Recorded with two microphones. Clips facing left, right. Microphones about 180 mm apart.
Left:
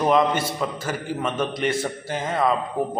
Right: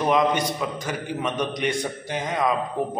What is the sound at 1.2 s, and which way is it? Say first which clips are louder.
A man's voice: left 1 dB; 15° right (ahead or behind).